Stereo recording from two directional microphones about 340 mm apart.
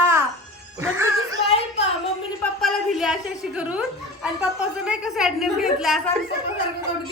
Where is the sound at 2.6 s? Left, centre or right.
Centre.